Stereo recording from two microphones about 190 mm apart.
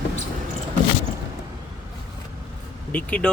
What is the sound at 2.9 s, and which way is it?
Speech, 5° left (ahead or behind).